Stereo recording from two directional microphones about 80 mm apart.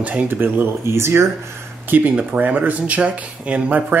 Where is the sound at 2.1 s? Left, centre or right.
Centre.